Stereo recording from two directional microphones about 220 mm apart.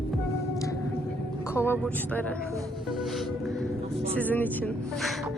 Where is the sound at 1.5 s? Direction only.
10° left (ahead or behind).